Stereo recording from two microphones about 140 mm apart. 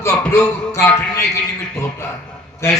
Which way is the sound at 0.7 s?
15° left (ahead or behind).